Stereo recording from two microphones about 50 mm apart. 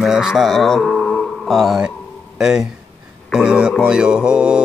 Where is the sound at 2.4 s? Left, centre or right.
Centre.